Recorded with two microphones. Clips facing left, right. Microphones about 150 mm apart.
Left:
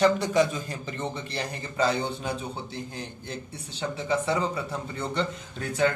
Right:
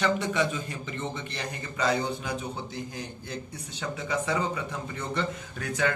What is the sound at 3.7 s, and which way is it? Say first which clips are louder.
Speech: left 3 dB; 30° left (ahead or behind).